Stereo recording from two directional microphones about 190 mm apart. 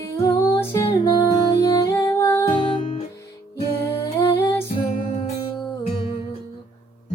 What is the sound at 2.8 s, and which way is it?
Music, 40° left (ahead or behind).